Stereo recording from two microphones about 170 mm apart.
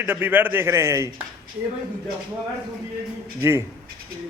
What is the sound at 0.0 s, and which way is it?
Speech, 10° right (ahead or behind).